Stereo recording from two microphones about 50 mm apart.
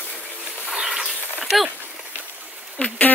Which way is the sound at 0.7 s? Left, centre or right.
Centre.